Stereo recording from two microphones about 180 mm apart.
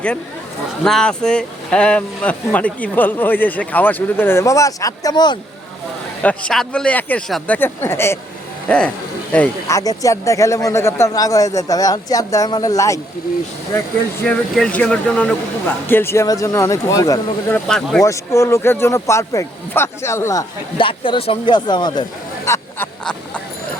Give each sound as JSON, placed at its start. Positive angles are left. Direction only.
{"t": 0.9, "sound": "speech", "side_deg": 5}
{"t": 6.2, "sound": "speech", "side_deg": 5}
{"t": 14.3, "sound": "speech", "side_deg": 5}
{"t": 17.7, "sound": "speech", "side_deg": 5}
{"t": 18.0, "sound": "speech", "side_deg": 15}
{"t": 20.7, "sound": "speech", "side_deg": 30}